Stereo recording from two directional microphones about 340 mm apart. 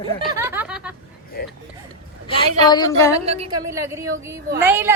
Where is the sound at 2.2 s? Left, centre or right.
Centre.